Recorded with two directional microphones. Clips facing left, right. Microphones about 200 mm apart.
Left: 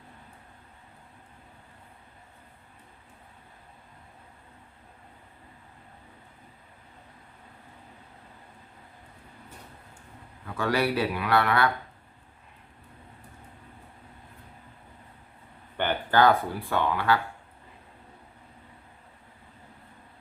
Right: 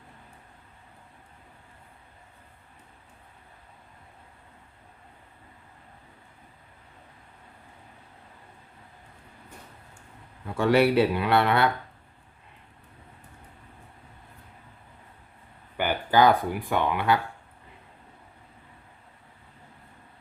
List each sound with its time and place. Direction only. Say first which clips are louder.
10.4 s a man's voice: right 6 dB; 25° right (ahead or behind)
15.8 s speech: right 1 dB; 10° right (ahead or behind)